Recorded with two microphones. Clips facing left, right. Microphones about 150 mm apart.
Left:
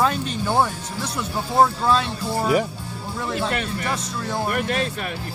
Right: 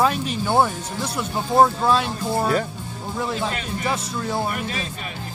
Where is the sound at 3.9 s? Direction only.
Centre (ahead or behind).